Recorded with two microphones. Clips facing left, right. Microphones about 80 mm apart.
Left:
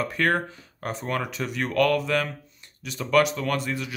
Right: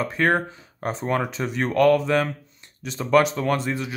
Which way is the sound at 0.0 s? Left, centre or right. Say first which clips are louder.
Right 3 dB; right.